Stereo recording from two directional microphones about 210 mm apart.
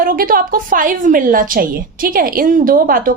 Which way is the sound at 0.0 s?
45° right (ahead or behind).